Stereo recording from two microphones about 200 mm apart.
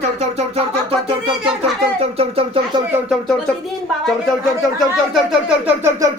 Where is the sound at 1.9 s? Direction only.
30° right (ahead or behind).